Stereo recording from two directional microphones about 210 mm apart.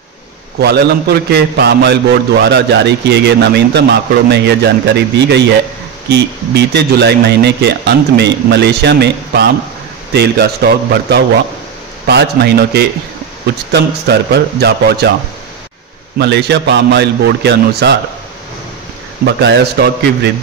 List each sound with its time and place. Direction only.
0.6 s a man's voice: 50° right (ahead or behind)
16.2 s a man's voice: 55° right (ahead or behind)
19.2 s a man's voice: 50° right (ahead or behind)